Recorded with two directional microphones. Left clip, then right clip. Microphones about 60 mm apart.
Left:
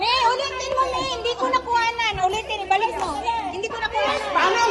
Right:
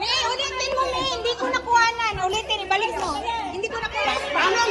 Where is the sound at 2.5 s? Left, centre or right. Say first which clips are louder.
Left 1 dB; left.